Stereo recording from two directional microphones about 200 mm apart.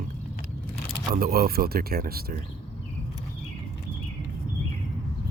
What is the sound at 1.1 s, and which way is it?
Speech, 50° right (ahead or behind).